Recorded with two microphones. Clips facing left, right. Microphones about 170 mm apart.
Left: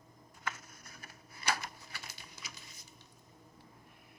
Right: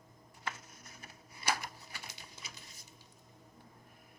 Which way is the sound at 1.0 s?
20° right (ahead or behind).